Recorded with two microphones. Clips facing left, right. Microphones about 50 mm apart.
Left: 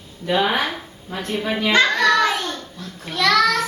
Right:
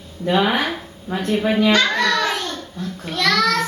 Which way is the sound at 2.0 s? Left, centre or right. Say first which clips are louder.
Left 3 dB; centre.